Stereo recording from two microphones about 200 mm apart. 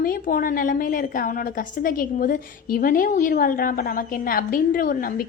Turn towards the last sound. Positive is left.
turn(degrees=45)  # may be behind; listen again after turning